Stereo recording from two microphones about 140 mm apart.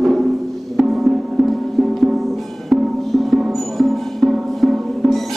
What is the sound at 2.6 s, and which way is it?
Music, centre (ahead or behind).